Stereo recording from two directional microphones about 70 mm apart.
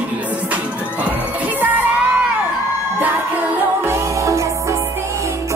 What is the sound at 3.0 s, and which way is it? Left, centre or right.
Music, right.